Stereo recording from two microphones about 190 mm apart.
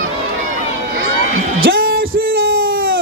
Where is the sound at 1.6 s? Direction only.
50° right (ahead or behind).